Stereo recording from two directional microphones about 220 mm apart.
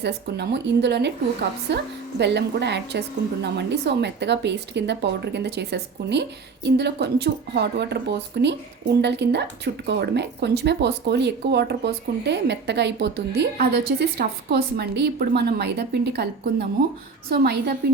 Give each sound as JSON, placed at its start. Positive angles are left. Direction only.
{"t": 0.0, "sound": "speech", "side_deg": -50}